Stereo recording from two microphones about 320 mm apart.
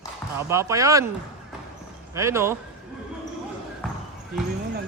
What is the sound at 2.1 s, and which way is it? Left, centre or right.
Speech, centre.